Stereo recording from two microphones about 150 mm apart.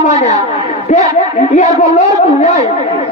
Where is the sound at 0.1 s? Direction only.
50° left (ahead or behind).